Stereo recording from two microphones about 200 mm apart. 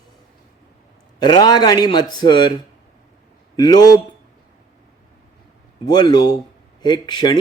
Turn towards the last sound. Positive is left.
turn(degrees=20)  # may be behind; listen again after turning